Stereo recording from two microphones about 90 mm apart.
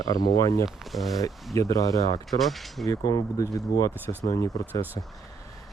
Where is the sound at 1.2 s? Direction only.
35° left (ahead or behind).